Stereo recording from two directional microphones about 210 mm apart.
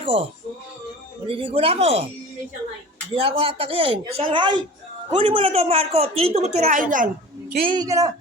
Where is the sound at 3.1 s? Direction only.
25° right (ahead or behind).